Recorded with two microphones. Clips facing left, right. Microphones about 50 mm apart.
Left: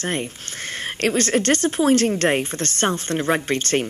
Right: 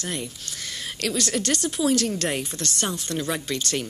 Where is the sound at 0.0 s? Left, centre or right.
Left.